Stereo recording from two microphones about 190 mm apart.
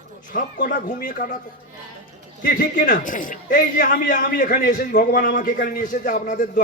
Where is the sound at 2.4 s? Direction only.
45° left (ahead or behind).